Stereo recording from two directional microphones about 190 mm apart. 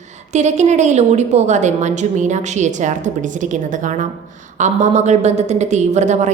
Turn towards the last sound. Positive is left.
turn(degrees=-40)  # may be behind; listen again after turning